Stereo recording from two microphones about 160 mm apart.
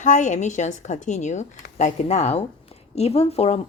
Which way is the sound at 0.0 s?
50° left (ahead or behind).